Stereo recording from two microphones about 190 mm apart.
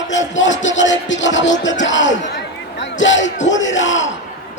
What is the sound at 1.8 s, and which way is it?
Speech, 75° left (ahead or behind).